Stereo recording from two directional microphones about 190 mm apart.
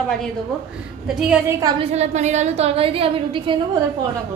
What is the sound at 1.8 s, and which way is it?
A woman's voice, 35° right (ahead or behind).